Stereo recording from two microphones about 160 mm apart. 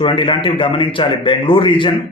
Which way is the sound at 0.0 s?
30° left (ahead or behind).